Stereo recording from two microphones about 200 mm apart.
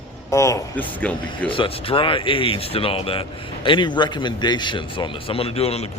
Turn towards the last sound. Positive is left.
turn(degrees=30)  # may be behind; listen again after turning